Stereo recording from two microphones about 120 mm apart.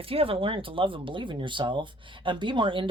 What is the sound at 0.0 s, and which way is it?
Speech, 50° right (ahead or behind).